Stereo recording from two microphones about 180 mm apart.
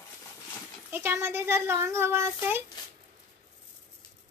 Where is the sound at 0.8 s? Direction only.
10° right (ahead or behind).